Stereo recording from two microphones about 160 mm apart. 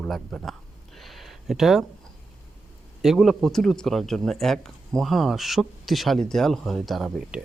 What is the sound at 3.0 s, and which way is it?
Speech, centre (ahead or behind).